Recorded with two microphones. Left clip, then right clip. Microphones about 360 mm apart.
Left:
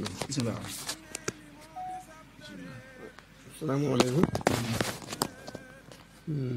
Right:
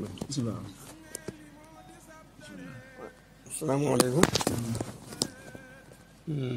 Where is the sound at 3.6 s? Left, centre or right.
Right.